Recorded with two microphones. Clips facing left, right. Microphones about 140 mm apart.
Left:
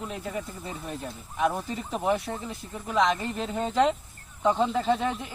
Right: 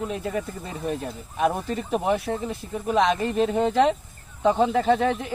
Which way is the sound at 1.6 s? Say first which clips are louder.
Right 3 dB; 60° right (ahead or behind).